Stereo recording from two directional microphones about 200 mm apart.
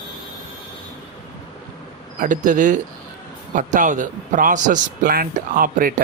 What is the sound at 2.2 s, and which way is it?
A man's voice, 40° right (ahead or behind).